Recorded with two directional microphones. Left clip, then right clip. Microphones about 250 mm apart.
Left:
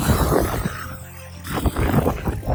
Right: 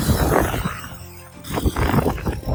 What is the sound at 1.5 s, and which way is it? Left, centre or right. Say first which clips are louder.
Roaring cats: right 1 dB; centre.